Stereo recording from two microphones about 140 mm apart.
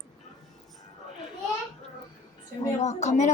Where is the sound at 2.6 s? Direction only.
55° left (ahead or behind).